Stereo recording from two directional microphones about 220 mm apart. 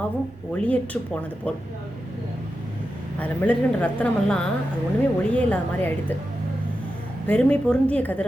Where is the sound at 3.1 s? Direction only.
5° left (ahead or behind).